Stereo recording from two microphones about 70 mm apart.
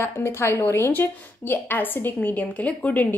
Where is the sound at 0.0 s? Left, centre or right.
Left.